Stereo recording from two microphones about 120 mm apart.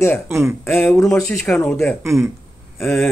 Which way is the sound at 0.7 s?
20° left (ahead or behind).